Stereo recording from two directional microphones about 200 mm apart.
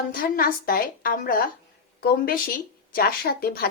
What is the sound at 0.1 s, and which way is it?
A woman's voice, 45° left (ahead or behind).